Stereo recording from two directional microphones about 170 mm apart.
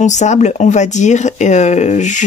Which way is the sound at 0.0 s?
45° left (ahead or behind).